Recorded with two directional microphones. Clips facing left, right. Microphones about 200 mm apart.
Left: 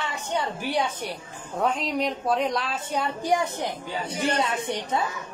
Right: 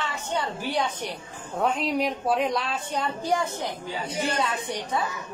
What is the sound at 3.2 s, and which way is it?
A woman's voice, 15° left (ahead or behind).